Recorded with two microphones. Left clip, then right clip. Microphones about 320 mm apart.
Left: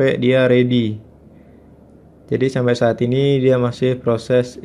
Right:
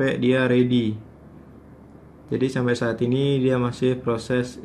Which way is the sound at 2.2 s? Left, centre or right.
Left.